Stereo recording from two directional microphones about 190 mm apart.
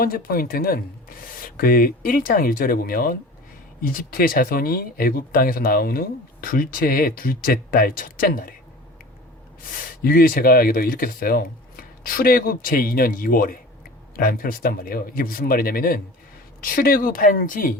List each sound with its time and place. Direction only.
0.0 s speech: 50° left (ahead or behind)
9.7 s speech: 50° left (ahead or behind)